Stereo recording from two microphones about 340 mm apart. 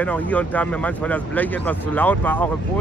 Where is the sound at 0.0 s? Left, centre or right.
Centre.